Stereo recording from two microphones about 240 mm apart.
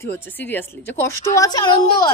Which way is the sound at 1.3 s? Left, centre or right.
Centre.